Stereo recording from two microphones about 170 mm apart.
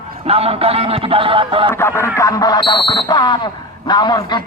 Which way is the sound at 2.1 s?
20° left (ahead or behind).